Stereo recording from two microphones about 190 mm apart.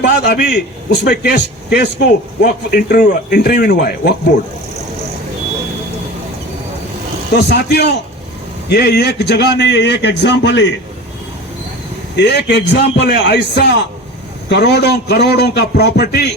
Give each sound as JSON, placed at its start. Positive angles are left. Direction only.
{"t": 0.0, "sound": "a man's voice", "side_deg": 60}
{"t": 7.3, "sound": "a man's voice", "side_deg": 60}
{"t": 12.1, "sound": "a man's voice", "side_deg": 60}